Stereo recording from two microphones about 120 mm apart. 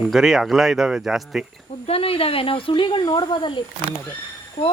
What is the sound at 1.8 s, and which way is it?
Speech, 55° left (ahead or behind).